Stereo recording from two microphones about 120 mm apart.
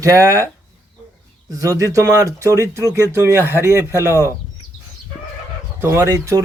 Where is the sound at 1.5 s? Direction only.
25° right (ahead or behind).